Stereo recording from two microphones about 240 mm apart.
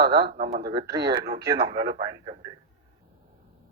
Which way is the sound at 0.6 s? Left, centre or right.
Centre.